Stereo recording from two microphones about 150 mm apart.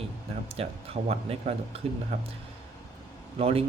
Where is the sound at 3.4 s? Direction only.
40° right (ahead or behind).